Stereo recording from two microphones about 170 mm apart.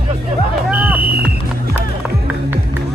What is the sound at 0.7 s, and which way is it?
Music, 10° right (ahead or behind).